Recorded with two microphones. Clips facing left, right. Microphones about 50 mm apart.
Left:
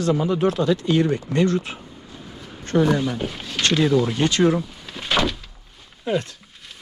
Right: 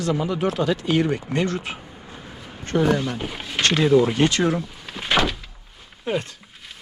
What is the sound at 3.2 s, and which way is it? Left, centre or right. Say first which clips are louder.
Speech: even; centre.